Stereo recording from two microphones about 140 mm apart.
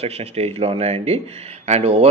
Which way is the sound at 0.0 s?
50° right (ahead or behind).